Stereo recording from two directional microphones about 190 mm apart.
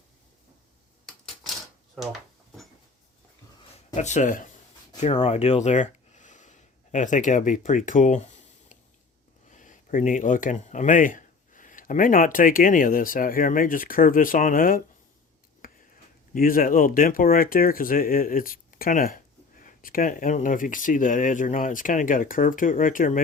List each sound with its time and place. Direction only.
3.9 s speech: 40° left (ahead or behind)
9.5 s speech: 40° left (ahead or behind)
16.3 s speech: 45° left (ahead or behind)